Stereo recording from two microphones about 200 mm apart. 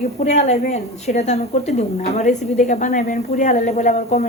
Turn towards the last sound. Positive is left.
turn(degrees=35)  # may be behind; listen again after turning